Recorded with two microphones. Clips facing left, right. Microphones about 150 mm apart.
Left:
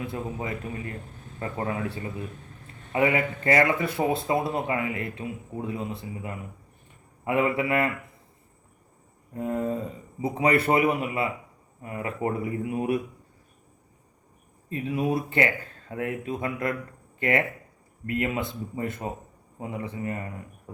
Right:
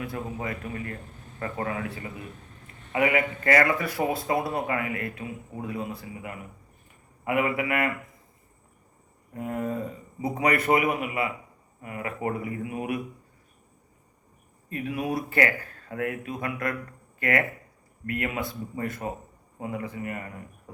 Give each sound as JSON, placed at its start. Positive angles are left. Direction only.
{"t": 0.0, "sound": "speech", "side_deg": 25}
{"t": 9.3, "sound": "speech", "side_deg": 30}
{"t": 14.7, "sound": "speech", "side_deg": 25}